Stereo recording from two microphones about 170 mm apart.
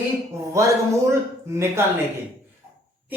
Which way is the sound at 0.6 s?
20° right (ahead or behind).